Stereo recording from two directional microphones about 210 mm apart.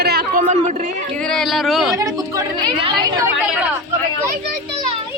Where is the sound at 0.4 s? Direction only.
30° right (ahead or behind).